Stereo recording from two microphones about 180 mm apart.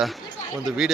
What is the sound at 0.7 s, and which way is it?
Speech, centre (ahead or behind).